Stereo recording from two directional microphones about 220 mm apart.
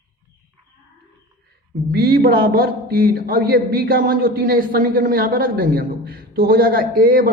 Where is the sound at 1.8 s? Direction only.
45° right (ahead or behind).